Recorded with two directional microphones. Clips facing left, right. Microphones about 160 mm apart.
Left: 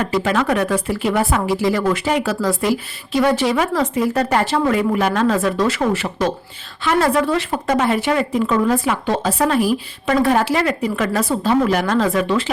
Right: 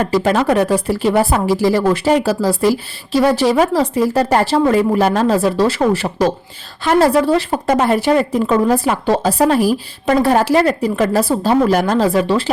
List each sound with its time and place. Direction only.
0.0 s speech: 35° right (ahead or behind)